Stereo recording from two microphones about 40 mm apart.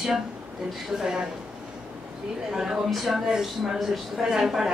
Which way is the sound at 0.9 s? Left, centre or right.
Centre.